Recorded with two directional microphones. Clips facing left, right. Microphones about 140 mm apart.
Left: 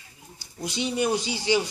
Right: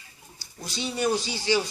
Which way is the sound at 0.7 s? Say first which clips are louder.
Left 1 dB; 20° left (ahead or behind).